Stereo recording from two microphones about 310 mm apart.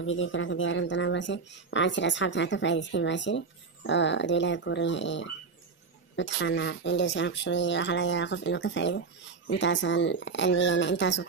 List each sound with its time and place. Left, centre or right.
0.0 s speech: left